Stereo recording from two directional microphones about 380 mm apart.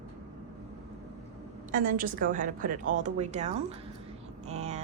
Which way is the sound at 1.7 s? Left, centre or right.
Right.